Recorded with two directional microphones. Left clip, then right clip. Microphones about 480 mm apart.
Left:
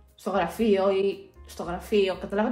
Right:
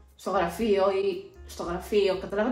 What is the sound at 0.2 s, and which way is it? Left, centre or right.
Speech, left.